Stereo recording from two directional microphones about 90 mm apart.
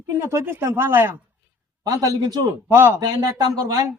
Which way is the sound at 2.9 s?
45° right (ahead or behind).